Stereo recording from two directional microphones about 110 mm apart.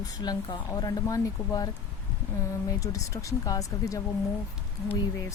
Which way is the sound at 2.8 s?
30° left (ahead or behind).